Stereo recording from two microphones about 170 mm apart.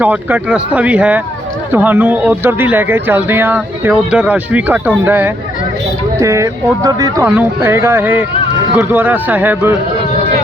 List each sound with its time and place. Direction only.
0.0 s speech: 10° right (ahead or behind)